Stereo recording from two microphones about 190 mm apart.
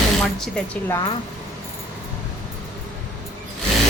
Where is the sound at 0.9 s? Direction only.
15° left (ahead or behind).